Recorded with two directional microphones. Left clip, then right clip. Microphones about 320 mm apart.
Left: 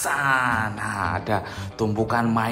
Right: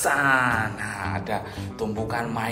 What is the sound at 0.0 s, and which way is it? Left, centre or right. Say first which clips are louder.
Speech: right 1 dB; centre.